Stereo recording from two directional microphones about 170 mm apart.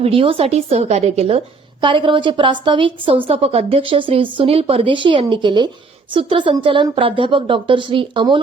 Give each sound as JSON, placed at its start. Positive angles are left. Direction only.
{"t": 0.0, "sound": "a woman's voice", "side_deg": -35}